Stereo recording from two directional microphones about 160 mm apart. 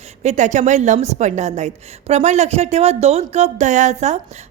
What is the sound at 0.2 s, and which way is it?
A woman's voice, 45° right (ahead or behind).